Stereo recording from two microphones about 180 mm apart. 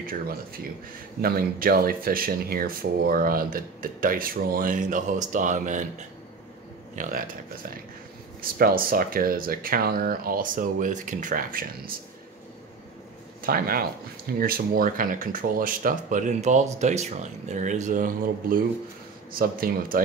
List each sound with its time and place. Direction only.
1.2 s speech: 55° right (ahead or behind)
8.4 s speech: 55° right (ahead or behind)
13.4 s speech: 55° right (ahead or behind)